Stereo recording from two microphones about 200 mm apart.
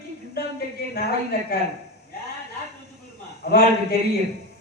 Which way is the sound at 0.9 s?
50° left (ahead or behind).